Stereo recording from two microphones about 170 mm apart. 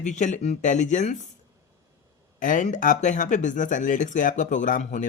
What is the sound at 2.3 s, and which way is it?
Speech, 50° left (ahead or behind).